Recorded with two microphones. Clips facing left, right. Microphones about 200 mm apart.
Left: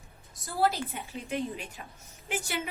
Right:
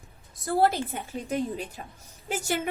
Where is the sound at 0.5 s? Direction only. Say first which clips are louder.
Right 4 dB; 55° right (ahead or behind).